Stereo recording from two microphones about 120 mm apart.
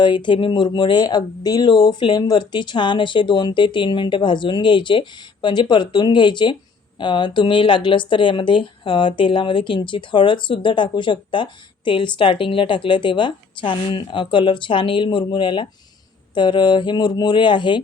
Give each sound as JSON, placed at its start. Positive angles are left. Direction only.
{"t": 0.0, "sound": "speech", "side_deg": 40}